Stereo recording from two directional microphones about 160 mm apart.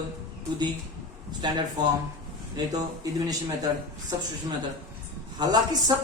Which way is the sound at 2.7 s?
25° right (ahead or behind).